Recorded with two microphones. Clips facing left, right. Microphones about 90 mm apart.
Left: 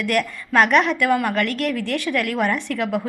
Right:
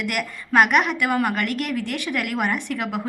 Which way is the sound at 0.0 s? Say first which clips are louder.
Left 5 dB; 15° right (ahead or behind).